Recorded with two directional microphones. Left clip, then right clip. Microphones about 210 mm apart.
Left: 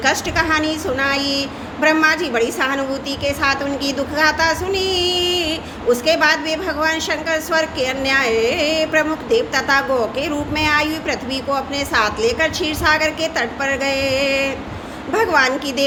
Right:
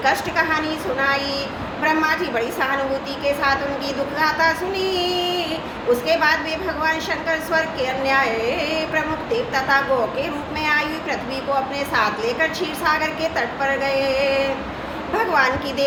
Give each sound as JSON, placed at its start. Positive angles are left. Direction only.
{"t": 0.0, "sound": "a woman's voice", "side_deg": 55}